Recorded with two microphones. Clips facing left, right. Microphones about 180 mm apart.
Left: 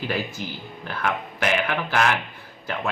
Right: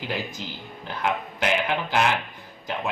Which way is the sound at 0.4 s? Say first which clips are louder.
Left 3 dB; 20° right (ahead or behind).